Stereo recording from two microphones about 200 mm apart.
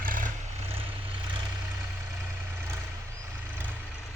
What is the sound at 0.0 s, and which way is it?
Vehicle, 40° right (ahead or behind).